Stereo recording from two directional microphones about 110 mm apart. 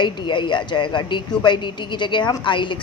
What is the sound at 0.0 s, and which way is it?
Speech, 45° left (ahead or behind).